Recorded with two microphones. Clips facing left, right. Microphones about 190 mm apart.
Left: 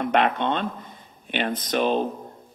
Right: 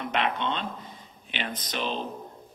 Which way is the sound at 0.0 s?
50° left (ahead or behind).